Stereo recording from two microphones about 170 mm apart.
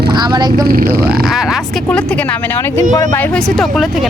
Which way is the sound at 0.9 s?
5° right (ahead or behind).